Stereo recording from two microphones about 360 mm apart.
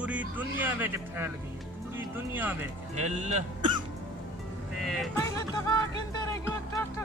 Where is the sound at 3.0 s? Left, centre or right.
Centre.